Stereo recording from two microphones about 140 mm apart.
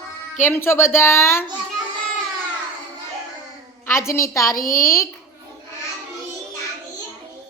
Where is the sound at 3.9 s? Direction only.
20° left (ahead or behind).